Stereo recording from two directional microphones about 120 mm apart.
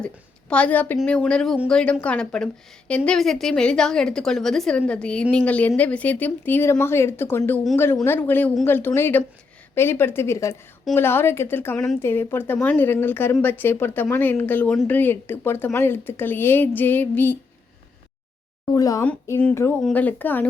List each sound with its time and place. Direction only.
0.5 s a woman's voice: 10° left (ahead or behind)
18.7 s speech: 30° left (ahead or behind)
19.8 s speech: 15° left (ahead or behind)